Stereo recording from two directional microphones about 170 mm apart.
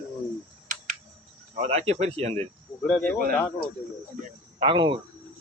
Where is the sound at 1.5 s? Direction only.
40° right (ahead or behind).